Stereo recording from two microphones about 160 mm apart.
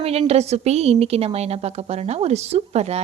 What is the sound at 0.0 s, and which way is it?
A woman's voice, 40° right (ahead or behind).